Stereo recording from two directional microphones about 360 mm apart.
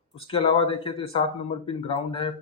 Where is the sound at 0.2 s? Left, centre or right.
Centre.